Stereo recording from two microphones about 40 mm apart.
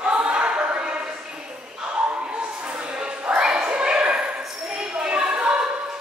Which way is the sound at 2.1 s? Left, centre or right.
Right.